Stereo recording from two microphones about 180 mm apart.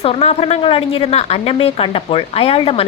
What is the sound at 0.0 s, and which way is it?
A woman's voice, 35° left (ahead or behind).